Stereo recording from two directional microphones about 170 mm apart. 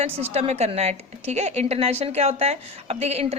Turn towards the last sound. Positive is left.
turn(degrees=-40)  # may be behind; listen again after turning